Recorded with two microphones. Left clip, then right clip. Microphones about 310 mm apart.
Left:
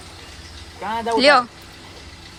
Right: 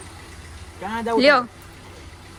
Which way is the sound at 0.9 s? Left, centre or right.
Centre.